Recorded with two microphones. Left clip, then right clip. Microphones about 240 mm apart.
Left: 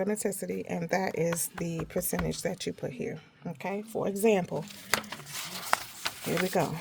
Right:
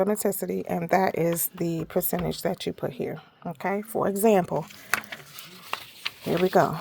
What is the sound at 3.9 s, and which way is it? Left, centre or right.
Speech, right.